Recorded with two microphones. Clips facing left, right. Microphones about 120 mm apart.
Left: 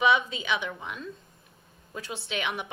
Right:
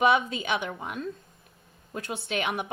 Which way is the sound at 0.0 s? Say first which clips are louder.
Right 1 dB; 50° right (ahead or behind).